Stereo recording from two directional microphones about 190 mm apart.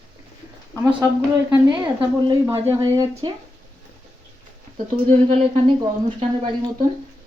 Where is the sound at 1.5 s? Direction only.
25° right (ahead or behind).